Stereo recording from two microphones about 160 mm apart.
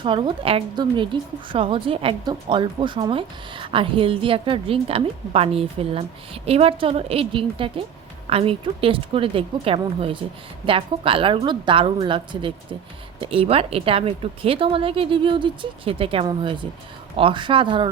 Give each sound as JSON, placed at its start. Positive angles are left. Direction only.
{"t": 0.0, "sound": "a woman's voice", "side_deg": -30}